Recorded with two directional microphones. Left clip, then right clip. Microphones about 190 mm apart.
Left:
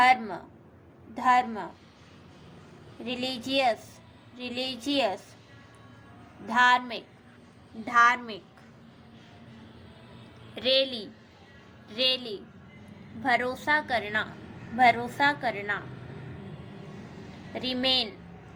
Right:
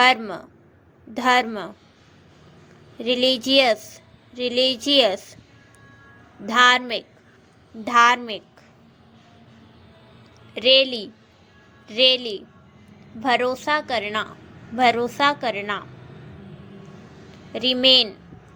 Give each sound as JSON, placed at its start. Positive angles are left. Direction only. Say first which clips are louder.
{"t": 0.0, "sound": "a woman's voice", "louder": "right 4 dB", "side_deg": -45}
{"t": 3.0, "sound": "a woman's voice", "louder": "right 13 dB", "side_deg": -45}
{"t": 6.5, "sound": "a woman's voice", "louder": "right 6 dB", "side_deg": -45}
{"t": 10.5, "sound": "a woman's voice", "louder": "right 9 dB", "side_deg": -35}
{"t": 17.5, "sound": "a woman's voice", "louder": "right 11 dB", "side_deg": -40}